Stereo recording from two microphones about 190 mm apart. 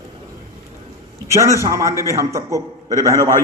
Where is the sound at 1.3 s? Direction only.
15° right (ahead or behind).